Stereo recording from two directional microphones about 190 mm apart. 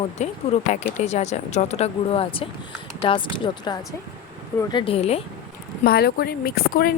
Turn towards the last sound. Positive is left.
turn(degrees=50)  # may be behind; listen again after turning